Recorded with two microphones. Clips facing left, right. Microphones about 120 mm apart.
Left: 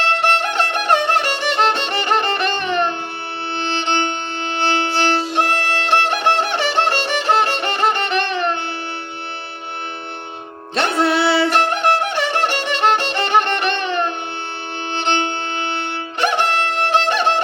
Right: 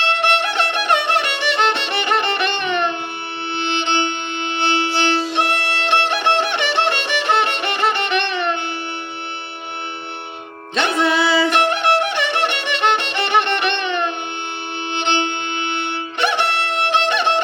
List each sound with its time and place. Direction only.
0.2 s music: 40° left (ahead or behind)
10.8 s music: 40° left (ahead or behind)
11.0 s music: 65° left (ahead or behind)
11.5 s violin: 40° left (ahead or behind)
14.9 s music: 40° left (ahead or behind)